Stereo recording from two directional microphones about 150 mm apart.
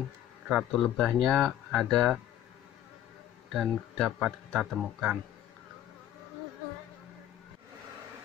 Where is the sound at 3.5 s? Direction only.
Centre (ahead or behind).